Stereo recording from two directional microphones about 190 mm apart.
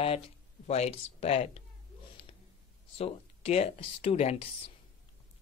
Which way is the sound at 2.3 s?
30° left (ahead or behind).